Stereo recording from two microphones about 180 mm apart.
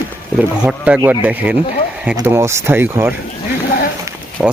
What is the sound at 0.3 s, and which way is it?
Speech, 5° right (ahead or behind).